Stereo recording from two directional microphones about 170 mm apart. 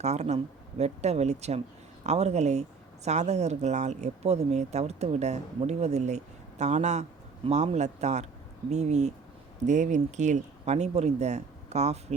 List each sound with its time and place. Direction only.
0.0 s speech: 40° right (ahead or behind)